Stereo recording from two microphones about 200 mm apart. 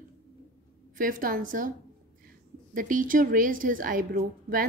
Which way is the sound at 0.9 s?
45° right (ahead or behind).